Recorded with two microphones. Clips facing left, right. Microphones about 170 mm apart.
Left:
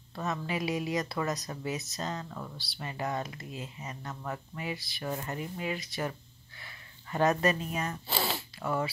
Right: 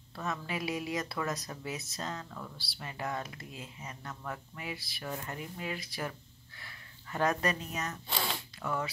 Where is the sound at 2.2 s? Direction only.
20° left (ahead or behind).